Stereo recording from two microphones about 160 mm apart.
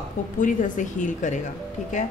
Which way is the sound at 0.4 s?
55° left (ahead or behind).